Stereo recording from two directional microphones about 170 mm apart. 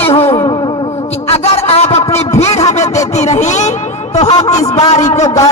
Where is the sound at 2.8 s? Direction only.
20° left (ahead or behind).